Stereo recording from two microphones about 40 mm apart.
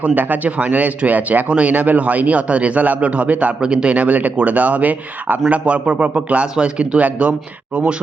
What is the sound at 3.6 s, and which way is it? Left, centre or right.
Speech, right.